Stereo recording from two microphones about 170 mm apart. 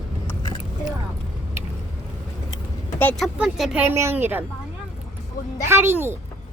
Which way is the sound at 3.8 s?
15° right (ahead or behind).